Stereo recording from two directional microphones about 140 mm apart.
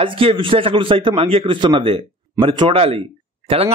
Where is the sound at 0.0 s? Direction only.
40° right (ahead or behind).